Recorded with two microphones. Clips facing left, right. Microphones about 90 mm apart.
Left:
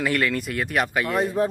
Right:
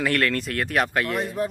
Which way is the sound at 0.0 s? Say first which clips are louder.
Even; centre (ahead or behind).